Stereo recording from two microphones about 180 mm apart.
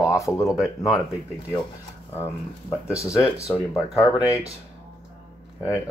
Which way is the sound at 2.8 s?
15° left (ahead or behind).